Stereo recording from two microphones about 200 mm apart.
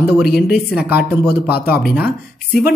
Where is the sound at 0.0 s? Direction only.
50° left (ahead or behind).